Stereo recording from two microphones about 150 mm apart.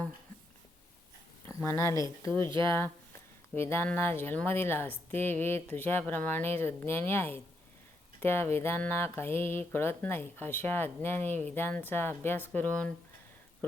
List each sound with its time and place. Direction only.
1.5 s speech: 20° left (ahead or behind)